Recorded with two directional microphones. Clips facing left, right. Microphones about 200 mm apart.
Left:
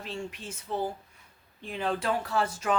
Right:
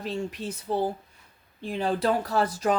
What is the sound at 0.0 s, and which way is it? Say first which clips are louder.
Speech: right 6 dB; 35° right (ahead or behind).